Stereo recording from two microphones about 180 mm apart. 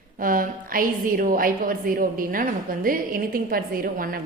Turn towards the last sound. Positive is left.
turn(degrees=-55)  # may be behind; listen again after turning